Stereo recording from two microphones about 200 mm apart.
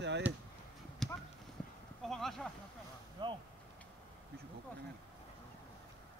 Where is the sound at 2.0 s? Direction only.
Centre (ahead or behind).